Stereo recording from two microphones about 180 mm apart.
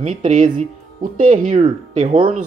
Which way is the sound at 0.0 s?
45° right (ahead or behind).